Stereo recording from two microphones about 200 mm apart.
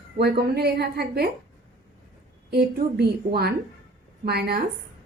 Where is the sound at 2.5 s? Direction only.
50° right (ahead or behind).